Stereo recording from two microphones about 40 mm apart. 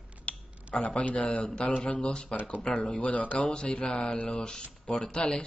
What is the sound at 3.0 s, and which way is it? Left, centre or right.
Speech, left.